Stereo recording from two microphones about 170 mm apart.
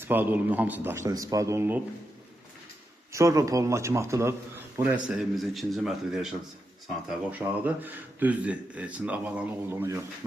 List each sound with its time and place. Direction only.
0.0 s speech: 10° right (ahead or behind)
3.1 s speech: 15° right (ahead or behind)
7.3 s speech: 10° right (ahead or behind)